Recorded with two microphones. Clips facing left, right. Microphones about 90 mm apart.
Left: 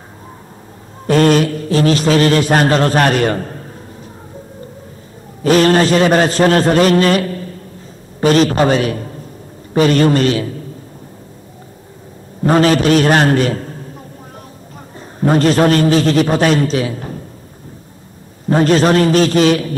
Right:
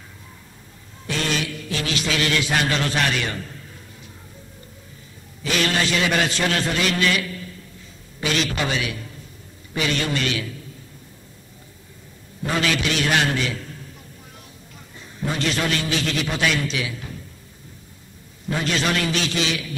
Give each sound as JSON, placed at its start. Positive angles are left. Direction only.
{"t": 1.0, "sound": "a man's voice", "side_deg": 45}
{"t": 5.4, "sound": "a man's voice", "side_deg": 40}
{"t": 12.4, "sound": "a man's voice", "side_deg": 45}
{"t": 15.0, "sound": "a man's voice", "side_deg": 45}
{"t": 18.5, "sound": "a man's voice", "side_deg": 40}